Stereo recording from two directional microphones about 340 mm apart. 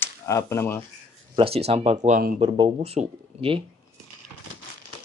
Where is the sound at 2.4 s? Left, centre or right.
Centre.